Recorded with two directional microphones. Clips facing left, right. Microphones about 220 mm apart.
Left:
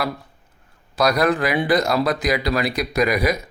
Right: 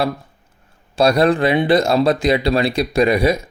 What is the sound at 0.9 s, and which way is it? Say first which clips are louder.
Speech: right 4 dB; 30° right (ahead or behind).